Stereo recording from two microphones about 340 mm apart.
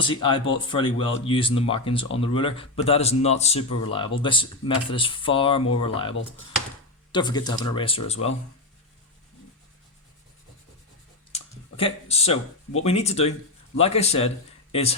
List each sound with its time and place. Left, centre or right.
0.0 s speech: centre
11.8 s speech: centre